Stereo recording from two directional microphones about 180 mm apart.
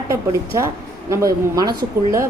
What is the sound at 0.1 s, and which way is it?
A woman's voice, 15° right (ahead or behind).